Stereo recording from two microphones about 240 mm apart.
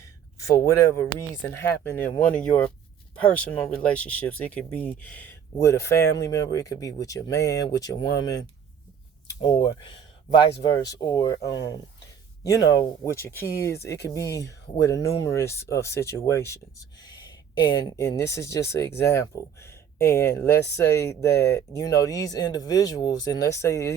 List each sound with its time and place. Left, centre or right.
0.4 s speech: centre
9.2 s speech: centre
17.6 s speech: centre